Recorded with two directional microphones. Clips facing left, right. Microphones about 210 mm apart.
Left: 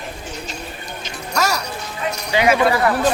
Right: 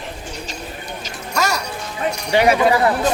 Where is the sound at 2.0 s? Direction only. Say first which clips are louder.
Right 3 dB; 50° right (ahead or behind).